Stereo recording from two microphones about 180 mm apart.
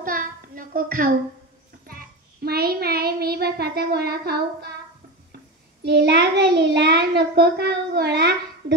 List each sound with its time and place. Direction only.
0.0 s a sound: 50° right (ahead or behind)
1.9 s child singing: 55° right (ahead or behind)
5.9 s child singing: 75° right (ahead or behind)